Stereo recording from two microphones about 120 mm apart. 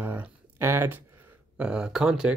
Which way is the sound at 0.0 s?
15° right (ahead or behind).